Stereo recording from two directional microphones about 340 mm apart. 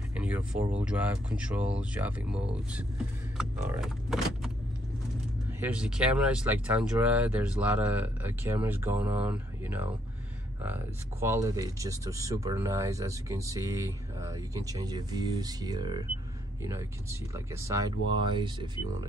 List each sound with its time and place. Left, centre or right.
0.1 s a sound: centre
0.7 s speech: centre
5.6 s speech: centre